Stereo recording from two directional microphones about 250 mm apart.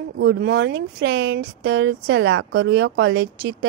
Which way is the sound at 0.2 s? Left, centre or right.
Right.